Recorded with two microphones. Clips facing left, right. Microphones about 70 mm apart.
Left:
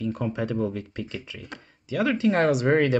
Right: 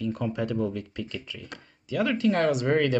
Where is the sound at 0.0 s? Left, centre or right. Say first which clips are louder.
Left 1 dB; centre.